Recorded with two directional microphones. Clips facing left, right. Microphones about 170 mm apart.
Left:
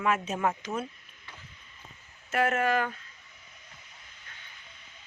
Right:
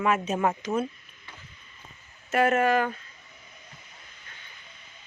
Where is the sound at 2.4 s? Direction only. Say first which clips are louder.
Right 4 dB; 15° right (ahead or behind).